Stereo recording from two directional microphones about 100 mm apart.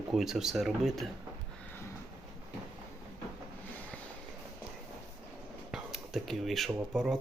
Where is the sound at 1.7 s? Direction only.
25° left (ahead or behind).